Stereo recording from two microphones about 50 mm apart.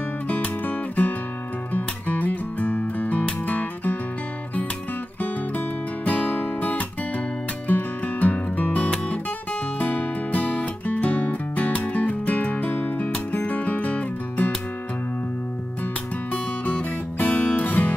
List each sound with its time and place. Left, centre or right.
0.3 s music: left
6.0 s music: left
16.3 s music: left